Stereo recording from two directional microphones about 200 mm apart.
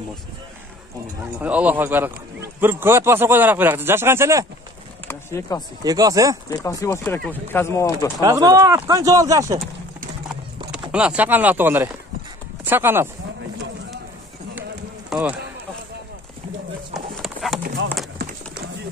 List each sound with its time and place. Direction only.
1.4 s speech: 5° right (ahead or behind)
5.0 s speech: 15° left (ahead or behind)
5.9 s speech: 20° right (ahead or behind)
6.5 s speech: 15° left (ahead or behind)
8.2 s speech: 20° right (ahead or behind)
10.9 s speech: 5° right (ahead or behind)
15.0 s a man's voice: 5° right (ahead or behind)
16.9 s clip-clop: centre (ahead or behind)